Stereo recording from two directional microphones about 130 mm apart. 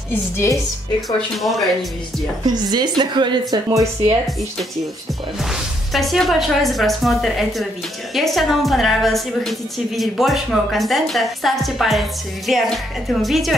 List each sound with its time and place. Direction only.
0.1 s a woman's voice: 20° left (ahead or behind)
1.0 s a woman's voice: centre (ahead or behind)
2.4 s speech: 35° right (ahead or behind)
3.6 s speech: 20° right (ahead or behind)
5.4 s a woman's voice: centre (ahead or behind)